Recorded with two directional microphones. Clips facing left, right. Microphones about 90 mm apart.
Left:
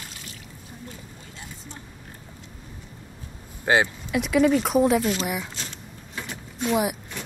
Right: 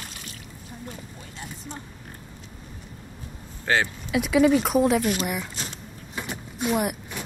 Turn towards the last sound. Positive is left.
turn(degrees=0)  # may be behind; listen again after turning